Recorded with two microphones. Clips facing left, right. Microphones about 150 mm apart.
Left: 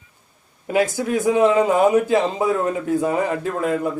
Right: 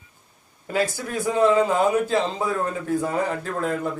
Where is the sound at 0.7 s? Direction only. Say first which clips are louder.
Left 5 dB; 15° left (ahead or behind).